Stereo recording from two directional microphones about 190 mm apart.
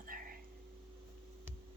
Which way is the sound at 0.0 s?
45° right (ahead or behind).